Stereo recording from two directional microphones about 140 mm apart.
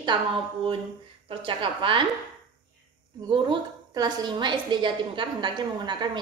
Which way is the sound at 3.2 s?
30° right (ahead or behind).